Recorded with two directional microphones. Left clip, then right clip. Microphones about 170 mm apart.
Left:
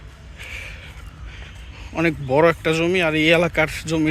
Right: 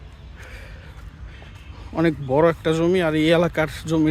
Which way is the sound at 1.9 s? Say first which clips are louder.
Left 1 dB; 20° right (ahead or behind).